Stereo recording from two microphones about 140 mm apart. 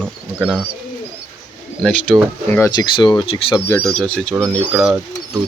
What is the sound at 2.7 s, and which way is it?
Speech, 30° left (ahead or behind).